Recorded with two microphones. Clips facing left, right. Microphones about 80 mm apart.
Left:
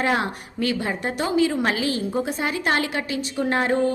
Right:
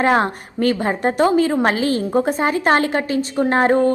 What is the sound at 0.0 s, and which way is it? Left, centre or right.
A woman's voice, right.